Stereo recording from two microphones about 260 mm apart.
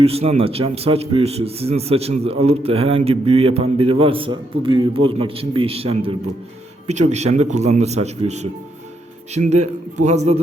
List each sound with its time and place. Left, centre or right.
0.0 s a man's voice: right